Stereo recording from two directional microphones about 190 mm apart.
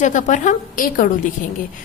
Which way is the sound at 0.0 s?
40° left (ahead or behind).